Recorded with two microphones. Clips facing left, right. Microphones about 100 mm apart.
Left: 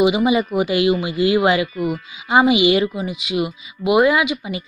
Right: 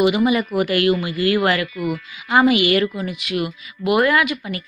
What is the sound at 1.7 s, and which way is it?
Speech, 35° left (ahead or behind).